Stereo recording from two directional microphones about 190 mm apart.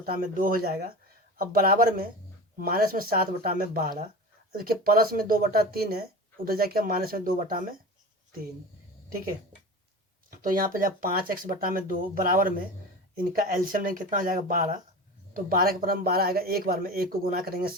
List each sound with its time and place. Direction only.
0.0 s speech: 50° right (ahead or behind)
10.2 s speech: 50° right (ahead or behind)